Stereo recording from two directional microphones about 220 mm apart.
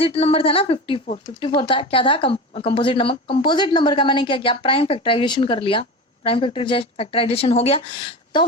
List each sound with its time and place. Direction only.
0.0 s speech: 25° left (ahead or behind)